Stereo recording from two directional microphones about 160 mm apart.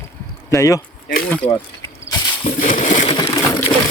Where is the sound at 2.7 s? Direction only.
40° left (ahead or behind).